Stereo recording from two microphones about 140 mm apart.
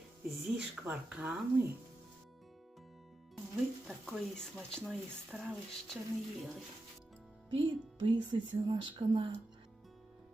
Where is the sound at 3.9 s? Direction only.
5° left (ahead or behind).